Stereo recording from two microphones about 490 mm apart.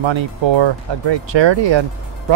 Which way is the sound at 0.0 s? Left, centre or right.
Right.